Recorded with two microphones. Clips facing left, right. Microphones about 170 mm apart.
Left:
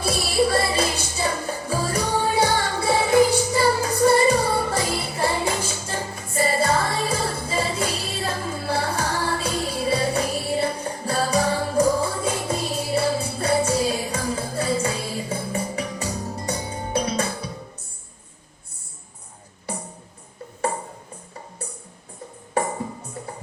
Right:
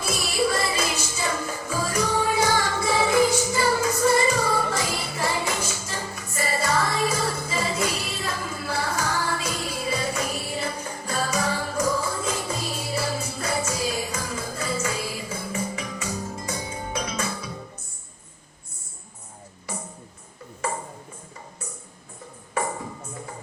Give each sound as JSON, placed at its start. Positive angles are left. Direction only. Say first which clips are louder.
{"t": 0.0, "sound": "music", "louder": "left 4 dB", "side_deg": 30}